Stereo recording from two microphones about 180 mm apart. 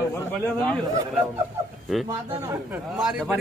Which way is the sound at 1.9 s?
Centre (ahead or behind).